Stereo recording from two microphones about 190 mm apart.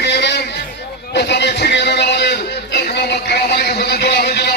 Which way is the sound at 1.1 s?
65° left (ahead or behind).